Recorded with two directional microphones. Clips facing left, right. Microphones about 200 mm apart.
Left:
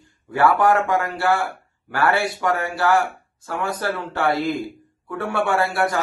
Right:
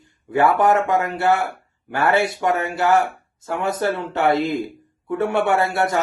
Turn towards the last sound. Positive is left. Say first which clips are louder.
# right 1 dB
turn(degrees=-20)  # may be behind; listen again after turning